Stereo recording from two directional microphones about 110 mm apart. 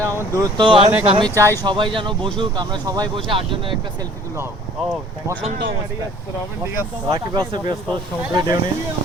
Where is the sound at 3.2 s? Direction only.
50° right (ahead or behind).